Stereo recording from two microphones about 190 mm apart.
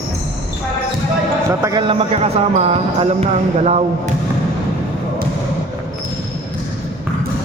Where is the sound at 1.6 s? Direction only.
20° right (ahead or behind).